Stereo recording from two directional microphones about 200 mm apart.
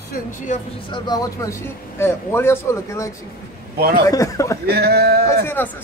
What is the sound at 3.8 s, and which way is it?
Speech, 50° right (ahead or behind).